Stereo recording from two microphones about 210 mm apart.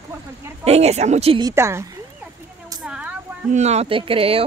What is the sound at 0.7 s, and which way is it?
Speech, 30° right (ahead or behind).